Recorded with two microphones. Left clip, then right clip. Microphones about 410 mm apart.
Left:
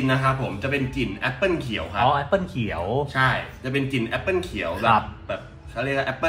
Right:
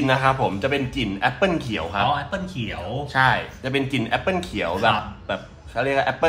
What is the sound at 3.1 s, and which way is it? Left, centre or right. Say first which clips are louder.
A man's voice: right 7 dB; centre.